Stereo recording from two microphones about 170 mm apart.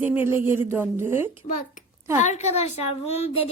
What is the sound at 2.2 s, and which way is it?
Child singing, 40° left (ahead or behind).